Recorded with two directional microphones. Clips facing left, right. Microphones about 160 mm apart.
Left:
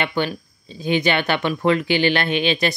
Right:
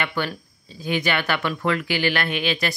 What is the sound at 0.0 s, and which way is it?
Speech, 20° left (ahead or behind).